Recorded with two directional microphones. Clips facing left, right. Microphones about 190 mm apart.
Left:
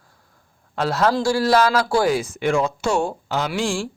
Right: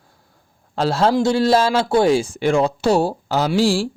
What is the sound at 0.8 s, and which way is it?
Speech, 30° right (ahead or behind).